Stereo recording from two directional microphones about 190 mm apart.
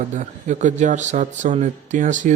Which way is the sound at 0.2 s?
40° right (ahead or behind).